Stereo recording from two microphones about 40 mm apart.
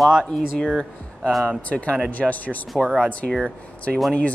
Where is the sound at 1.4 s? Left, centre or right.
Left.